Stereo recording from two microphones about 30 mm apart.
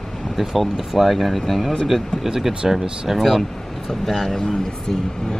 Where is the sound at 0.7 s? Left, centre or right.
Centre.